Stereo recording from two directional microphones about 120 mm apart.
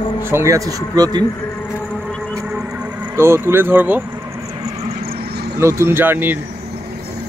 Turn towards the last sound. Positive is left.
turn(degrees=-15)  # may be behind; listen again after turning